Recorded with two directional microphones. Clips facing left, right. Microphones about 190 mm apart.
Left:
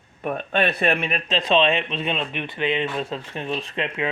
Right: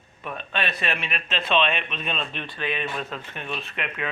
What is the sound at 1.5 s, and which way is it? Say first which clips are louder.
Speech: left 4 dB; 30° left (ahead or behind).